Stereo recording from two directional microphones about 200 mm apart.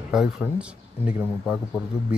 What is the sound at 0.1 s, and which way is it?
Speech, 5° right (ahead or behind).